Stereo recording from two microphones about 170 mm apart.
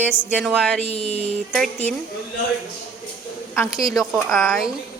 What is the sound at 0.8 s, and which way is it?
Speech, 40° left (ahead or behind).